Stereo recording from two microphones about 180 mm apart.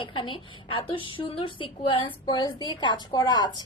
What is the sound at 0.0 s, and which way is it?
A woman's voice, 30° left (ahead or behind).